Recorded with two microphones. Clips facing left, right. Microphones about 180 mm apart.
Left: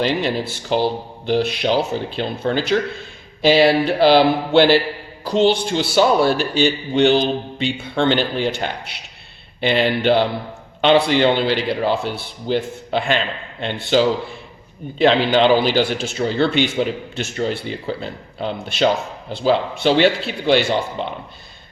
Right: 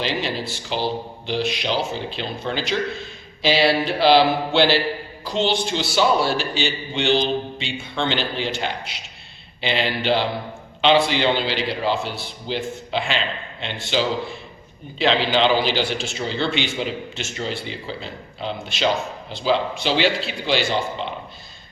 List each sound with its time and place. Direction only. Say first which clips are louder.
0.0 s a man's voice: left 5 dB; 50° left (ahead or behind)